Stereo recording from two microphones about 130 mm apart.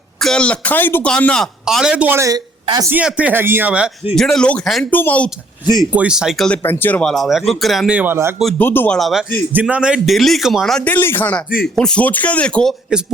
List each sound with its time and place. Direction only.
0.2 s a man's voice: 5° left (ahead or behind)
2.0 s speech: 20° right (ahead or behind)
2.9 s speech: 10° right (ahead or behind)
4.1 s a man's voice: 5° left (ahead or behind)
4.9 s speech: 15° left (ahead or behind)
5.9 s a man's voice: 10° right (ahead or behind)
6.6 s speech: 15° left (ahead or behind)
7.1 s a man's voice: centre (ahead or behind)
8.5 s speech: 15° left (ahead or behind)
9.0 s a man's voice: centre (ahead or behind)
9.5 s a man's voice: 10° right (ahead or behind)
10.8 s speech: 15° left (ahead or behind)